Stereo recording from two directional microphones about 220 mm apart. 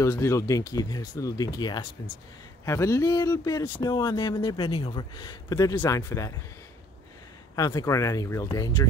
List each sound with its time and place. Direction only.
0.0 s speech: 15° left (ahead or behind)
7.5 s speech: 15° left (ahead or behind)